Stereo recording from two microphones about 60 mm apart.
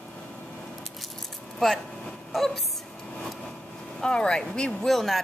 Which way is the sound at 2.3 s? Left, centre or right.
Centre.